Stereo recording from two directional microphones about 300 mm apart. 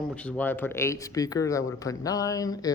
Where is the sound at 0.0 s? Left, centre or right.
Centre.